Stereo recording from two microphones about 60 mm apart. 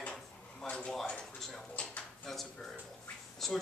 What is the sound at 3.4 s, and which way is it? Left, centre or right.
Speech, centre.